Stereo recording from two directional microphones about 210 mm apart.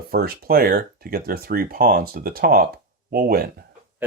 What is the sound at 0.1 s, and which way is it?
Speech, 45° right (ahead or behind).